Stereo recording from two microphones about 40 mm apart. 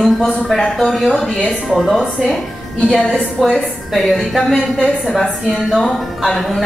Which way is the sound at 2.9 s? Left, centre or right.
Centre.